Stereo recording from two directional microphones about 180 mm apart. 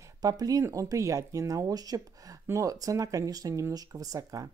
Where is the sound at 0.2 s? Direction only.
20° right (ahead or behind).